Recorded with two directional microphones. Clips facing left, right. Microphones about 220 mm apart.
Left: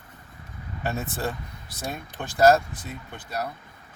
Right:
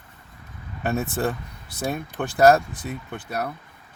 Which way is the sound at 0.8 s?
55° right (ahead or behind).